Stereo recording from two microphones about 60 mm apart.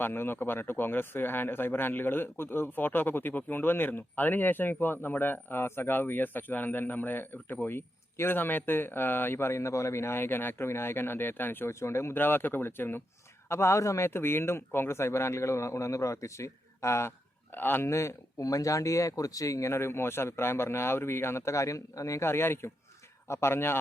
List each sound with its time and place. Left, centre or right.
0.0 s speech: left
11.7 s speech: left
12.1 s speech: left
13.5 s speech: left
14.1 s speech: left
17.8 s speech: left
18.4 s speech: left
22.2 s speech: left